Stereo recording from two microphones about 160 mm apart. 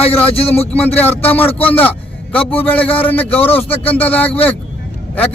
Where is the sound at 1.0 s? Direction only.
10° left (ahead or behind).